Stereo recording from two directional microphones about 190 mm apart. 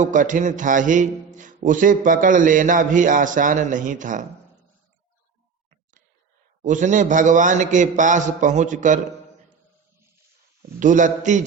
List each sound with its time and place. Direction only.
0.0 s a man's voice: 40° right (ahead or behind)
6.6 s a man's voice: 40° right (ahead or behind)
10.8 s a man's voice: 40° right (ahead or behind)